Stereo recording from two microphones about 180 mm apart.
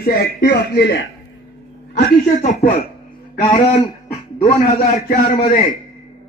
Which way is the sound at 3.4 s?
25° left (ahead or behind).